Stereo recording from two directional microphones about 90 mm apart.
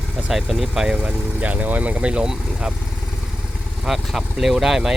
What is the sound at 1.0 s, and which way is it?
Speech, 15° right (ahead or behind).